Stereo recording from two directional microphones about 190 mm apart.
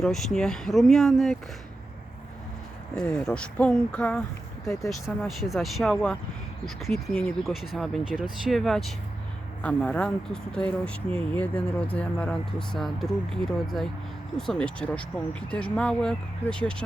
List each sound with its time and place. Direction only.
0.0 s speech: centre (ahead or behind)
2.9 s speech: 5° left (ahead or behind)